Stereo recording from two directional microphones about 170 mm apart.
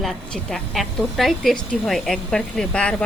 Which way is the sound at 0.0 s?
Centre (ahead or behind).